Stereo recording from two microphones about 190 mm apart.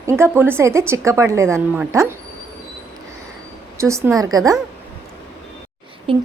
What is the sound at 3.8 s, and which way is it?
Speech, 15° right (ahead or behind).